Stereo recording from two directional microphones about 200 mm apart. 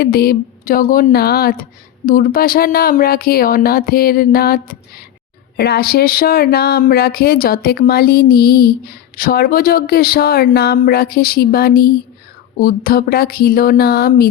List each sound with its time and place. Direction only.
0.0 s speech: 50° left (ahead or behind)